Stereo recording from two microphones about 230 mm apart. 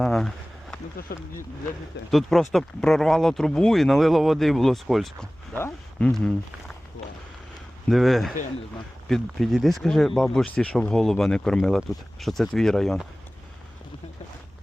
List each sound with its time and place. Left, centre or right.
0.0 s a sound: centre
1.1 s speech: left
2.0 s speech: centre
7.9 s speech: centre